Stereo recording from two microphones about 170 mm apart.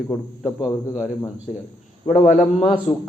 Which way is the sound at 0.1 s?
5° left (ahead or behind).